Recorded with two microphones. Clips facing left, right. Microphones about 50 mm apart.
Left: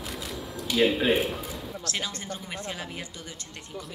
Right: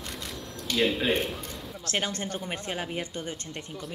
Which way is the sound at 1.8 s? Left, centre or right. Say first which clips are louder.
Right 5 dB; right.